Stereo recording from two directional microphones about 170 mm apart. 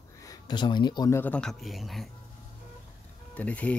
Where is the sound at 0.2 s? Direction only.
20° left (ahead or behind).